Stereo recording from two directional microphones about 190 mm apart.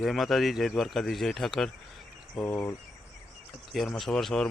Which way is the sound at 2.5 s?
10° left (ahead or behind).